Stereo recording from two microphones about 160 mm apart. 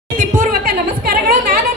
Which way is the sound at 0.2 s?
60° right (ahead or behind).